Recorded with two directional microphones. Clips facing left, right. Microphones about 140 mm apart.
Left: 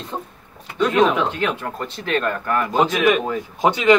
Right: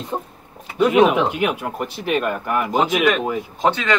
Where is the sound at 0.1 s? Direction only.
25° right (ahead or behind).